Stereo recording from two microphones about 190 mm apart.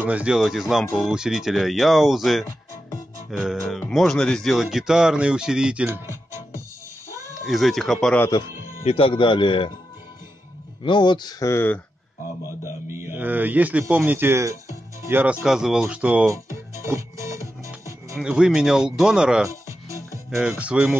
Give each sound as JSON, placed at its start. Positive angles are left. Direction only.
{"t": 0.0, "sound": "speech", "side_deg": -5}
{"t": 7.4, "sound": "speech", "side_deg": 0}
{"t": 8.3, "sound": "speech", "side_deg": 25}
{"t": 10.8, "sound": "speech", "side_deg": 25}
{"t": 12.6, "sound": "speech", "side_deg": -15}
{"t": 18.1, "sound": "speech", "side_deg": -5}
{"t": 19.4, "sound": "music", "side_deg": -15}
{"t": 20.2, "sound": "speech", "side_deg": -5}